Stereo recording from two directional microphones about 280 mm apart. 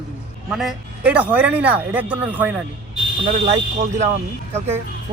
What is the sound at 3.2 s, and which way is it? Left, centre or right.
Speech, right.